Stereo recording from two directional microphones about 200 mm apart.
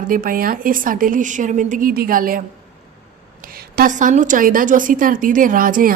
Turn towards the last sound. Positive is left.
turn(degrees=-45)  # may be behind; listen again after turning